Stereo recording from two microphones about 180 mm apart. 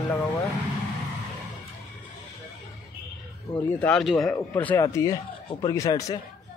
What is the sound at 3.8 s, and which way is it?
A man's voice, 5° left (ahead or behind).